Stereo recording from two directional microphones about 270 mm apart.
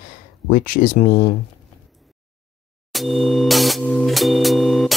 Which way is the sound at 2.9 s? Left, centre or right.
Centre.